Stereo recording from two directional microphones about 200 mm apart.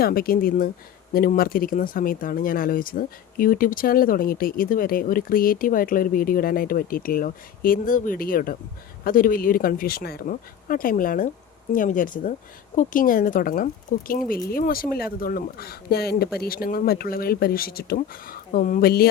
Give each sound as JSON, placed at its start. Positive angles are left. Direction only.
{"t": 0.0, "sound": "speech", "side_deg": 50}